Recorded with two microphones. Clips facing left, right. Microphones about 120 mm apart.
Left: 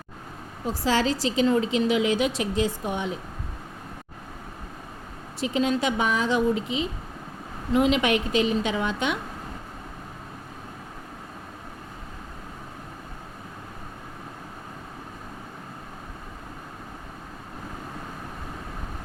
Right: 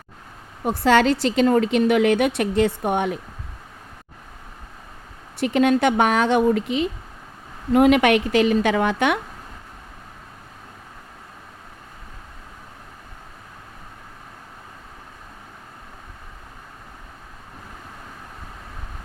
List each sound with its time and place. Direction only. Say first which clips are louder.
0.6 s a woman's voice: right 7 dB; 60° right (ahead or behind)
5.4 s a woman's voice: right 6 dB; 65° right (ahead or behind)